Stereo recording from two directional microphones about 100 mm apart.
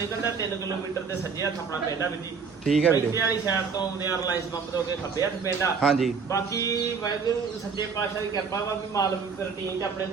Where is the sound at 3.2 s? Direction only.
35° left (ahead or behind).